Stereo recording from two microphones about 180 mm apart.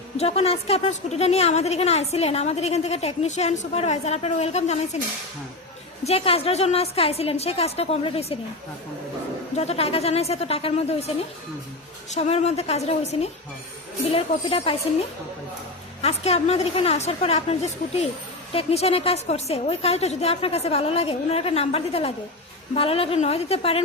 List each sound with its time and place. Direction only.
0.2 s a woman's voice: 35° left (ahead or behind)
6.1 s a woman's voice: 35° left (ahead or behind)
9.6 s a woman's voice: 35° left (ahead or behind)
12.1 s a woman's voice: 40° left (ahead or behind)
16.0 s a woman's voice: 35° left (ahead or behind)